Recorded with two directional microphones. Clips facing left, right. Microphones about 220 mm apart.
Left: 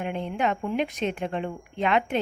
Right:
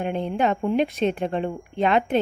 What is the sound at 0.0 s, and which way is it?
A woman's voice, 35° right (ahead or behind).